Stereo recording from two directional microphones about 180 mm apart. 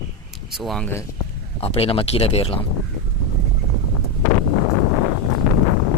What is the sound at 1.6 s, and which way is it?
Speech, 30° left (ahead or behind).